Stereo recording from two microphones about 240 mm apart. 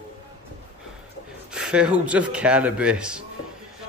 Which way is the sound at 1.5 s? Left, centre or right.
Centre.